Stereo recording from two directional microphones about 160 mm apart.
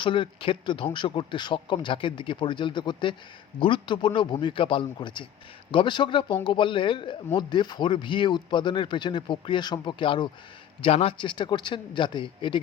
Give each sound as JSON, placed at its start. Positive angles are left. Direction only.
{"t": 0.0, "sound": "speech", "side_deg": 30}